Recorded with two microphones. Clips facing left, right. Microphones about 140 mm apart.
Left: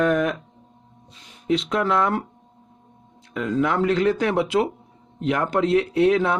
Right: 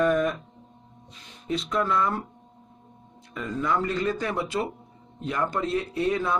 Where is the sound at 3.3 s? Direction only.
80° left.